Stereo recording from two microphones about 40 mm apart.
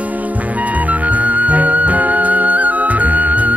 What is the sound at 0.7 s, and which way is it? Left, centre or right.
Music, right.